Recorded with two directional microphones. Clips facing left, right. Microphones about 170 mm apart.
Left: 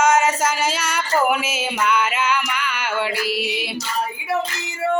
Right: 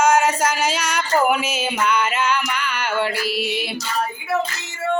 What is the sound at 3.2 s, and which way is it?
Music, 40° right (ahead or behind).